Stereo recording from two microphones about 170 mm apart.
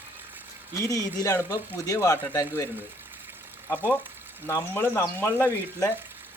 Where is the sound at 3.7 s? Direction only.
10° left (ahead or behind).